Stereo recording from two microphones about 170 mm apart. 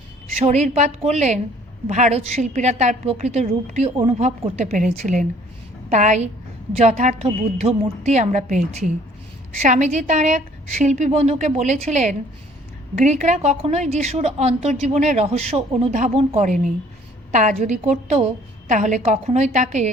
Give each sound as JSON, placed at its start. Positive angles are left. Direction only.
{"t": 0.3, "sound": "a woman's voice", "side_deg": -40}